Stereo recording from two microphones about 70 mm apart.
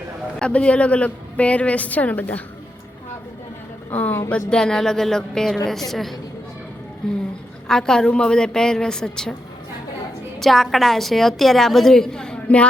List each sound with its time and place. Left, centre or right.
0.3 s a woman's voice: centre
3.9 s a woman's voice: left
10.4 s a woman's voice: centre